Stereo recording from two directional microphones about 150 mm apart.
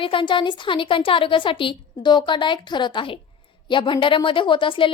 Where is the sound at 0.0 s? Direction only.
35° left (ahead or behind).